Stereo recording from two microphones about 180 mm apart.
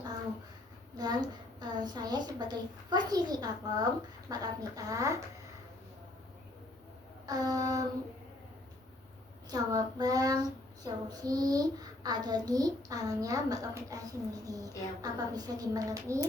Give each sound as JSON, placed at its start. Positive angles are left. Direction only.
{"t": 0.9, "sound": "a child's voice", "side_deg": -25}
{"t": 7.3, "sound": "a child's voice", "side_deg": -20}
{"t": 9.5, "sound": "a child's voice", "side_deg": -20}